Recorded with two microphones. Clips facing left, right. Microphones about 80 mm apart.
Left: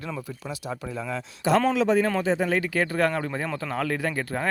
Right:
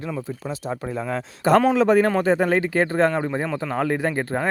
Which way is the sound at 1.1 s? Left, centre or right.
Right.